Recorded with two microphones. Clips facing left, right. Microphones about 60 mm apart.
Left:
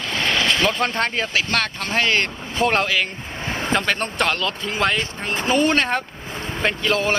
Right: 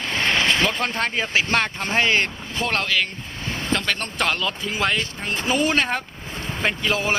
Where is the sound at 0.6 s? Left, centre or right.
Centre.